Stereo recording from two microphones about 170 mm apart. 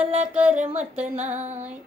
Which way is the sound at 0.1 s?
40° right (ahead or behind).